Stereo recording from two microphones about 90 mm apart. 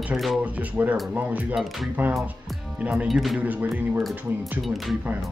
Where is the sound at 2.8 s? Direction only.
15° right (ahead or behind).